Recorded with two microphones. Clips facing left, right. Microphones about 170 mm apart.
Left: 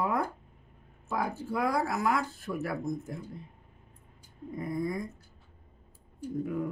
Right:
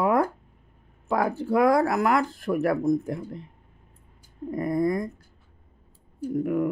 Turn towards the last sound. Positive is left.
turn(degrees=-65)  # may be behind; listen again after turning